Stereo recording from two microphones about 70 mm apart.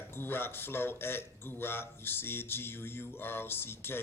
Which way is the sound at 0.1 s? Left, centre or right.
Left.